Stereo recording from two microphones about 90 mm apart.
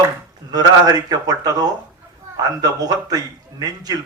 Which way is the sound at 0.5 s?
45° right (ahead or behind).